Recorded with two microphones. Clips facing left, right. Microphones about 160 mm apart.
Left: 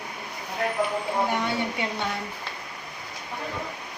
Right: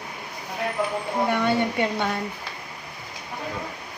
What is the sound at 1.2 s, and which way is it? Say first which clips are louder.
Speech: right 4 dB; 60° right (ahead or behind).